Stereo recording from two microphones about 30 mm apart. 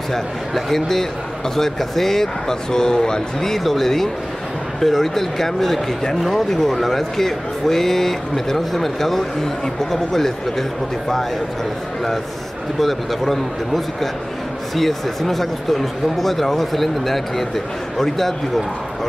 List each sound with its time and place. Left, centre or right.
0.1 s a man's voice: centre
2.7 s speech: left
3.5 s a man's voice: centre
12.7 s a man's voice: centre